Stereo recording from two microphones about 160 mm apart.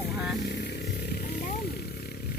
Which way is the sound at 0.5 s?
85° left.